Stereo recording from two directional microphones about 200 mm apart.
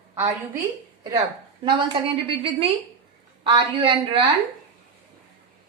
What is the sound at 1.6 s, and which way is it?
A woman's voice, 25° right (ahead or behind).